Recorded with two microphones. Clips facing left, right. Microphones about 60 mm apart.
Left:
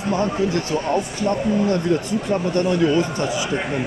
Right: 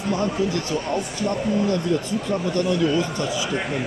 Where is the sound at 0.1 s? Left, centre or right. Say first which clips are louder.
Left 3 dB; left.